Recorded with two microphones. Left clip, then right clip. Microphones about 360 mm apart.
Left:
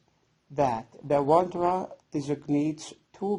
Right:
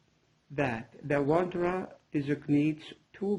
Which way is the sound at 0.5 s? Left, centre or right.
Centre.